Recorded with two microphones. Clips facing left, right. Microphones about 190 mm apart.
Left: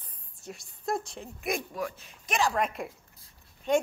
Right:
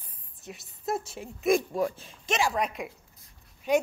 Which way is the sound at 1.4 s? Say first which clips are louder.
Right 8 dB; 25° right (ahead or behind).